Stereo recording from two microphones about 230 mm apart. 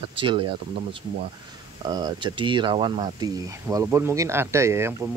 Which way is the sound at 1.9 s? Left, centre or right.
Centre.